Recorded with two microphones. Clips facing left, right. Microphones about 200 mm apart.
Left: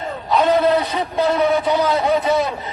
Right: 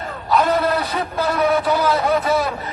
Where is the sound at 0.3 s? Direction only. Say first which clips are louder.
Left 2 dB; 20° left (ahead or behind).